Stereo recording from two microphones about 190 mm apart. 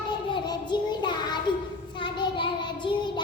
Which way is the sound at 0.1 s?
25° left (ahead or behind).